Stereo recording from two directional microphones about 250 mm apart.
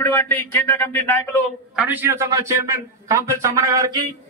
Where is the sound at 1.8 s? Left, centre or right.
Centre.